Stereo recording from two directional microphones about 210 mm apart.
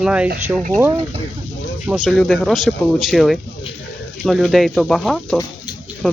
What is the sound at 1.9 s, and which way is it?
Speech, centre (ahead or behind).